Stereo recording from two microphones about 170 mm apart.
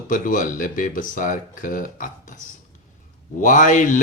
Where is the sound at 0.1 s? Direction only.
50° left (ahead or behind).